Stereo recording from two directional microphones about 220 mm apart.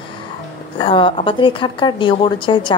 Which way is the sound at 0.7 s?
25° left (ahead or behind).